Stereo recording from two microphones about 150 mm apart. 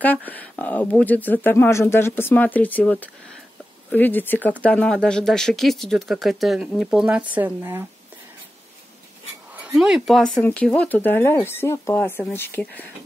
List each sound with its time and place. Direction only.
0.0 s speech: 10° left (ahead or behind); by 7.8 s 15° right (ahead or behind)
9.8 s speech: centre (ahead or behind)